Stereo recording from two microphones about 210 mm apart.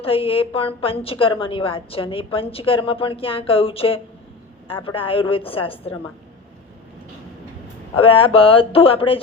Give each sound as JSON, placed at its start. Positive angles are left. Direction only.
{"t": 0.0, "sound": "a woman's voice", "side_deg": 25}
{"t": 7.9, "sound": "a woman's voice", "side_deg": 25}